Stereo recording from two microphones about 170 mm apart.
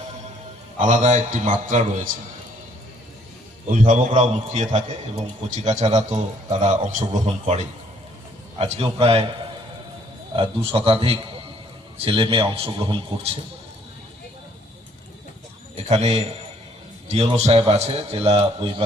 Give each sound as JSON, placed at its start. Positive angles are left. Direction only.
{"t": 0.8, "sound": "a man's voice", "side_deg": -45}
{"t": 3.7, "sound": "a man's voice", "side_deg": -50}
{"t": 10.3, "sound": "a man's voice", "side_deg": -30}
{"t": 15.7, "sound": "a man's voice", "side_deg": -40}